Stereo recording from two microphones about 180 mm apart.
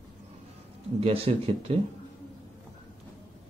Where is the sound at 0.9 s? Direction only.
30° right (ahead or behind).